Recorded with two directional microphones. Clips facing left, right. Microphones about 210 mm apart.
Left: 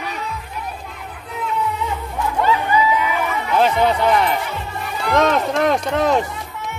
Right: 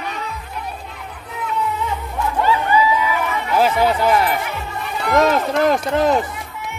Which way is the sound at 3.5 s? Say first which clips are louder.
Even; 5° right (ahead or behind).